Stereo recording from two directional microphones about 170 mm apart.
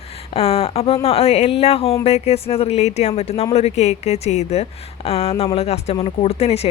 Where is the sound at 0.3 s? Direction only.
35° left (ahead or behind).